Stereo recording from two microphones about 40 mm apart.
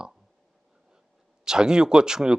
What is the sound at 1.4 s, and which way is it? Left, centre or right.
Speech, centre.